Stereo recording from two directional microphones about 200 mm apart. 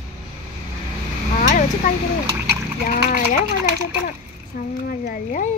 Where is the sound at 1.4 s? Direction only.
40° left (ahead or behind).